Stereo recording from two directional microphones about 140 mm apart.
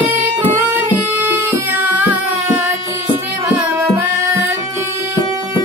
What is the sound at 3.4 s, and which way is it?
Tabla, 15° right (ahead or behind).